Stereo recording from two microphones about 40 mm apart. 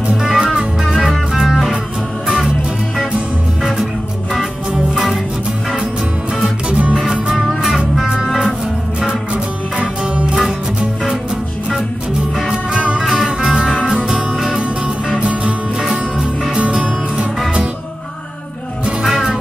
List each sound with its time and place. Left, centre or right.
0.2 s music: centre
4.9 s music: centre
6.7 s music: right
7.1 s music: centre
12.4 s music: right
13.0 s music: centre
13.4 s music: right
15.1 s music: right
15.8 s music: centre